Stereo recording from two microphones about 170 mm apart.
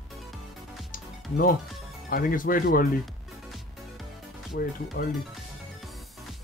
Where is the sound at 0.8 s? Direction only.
55° left (ahead or behind).